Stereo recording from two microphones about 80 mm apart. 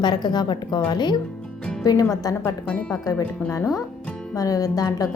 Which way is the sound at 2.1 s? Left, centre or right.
Left.